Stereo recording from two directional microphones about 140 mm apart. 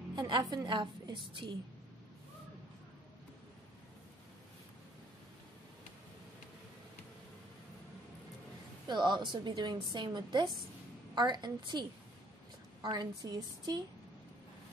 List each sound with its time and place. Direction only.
0.1 s a woman's voice: 30° right (ahead or behind)
8.8 s a woman's voice: 30° right (ahead or behind)